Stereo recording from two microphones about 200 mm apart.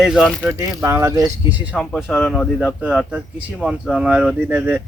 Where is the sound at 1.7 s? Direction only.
5° left (ahead or behind).